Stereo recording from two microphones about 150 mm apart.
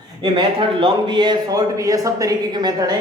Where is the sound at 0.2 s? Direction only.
30° right (ahead or behind).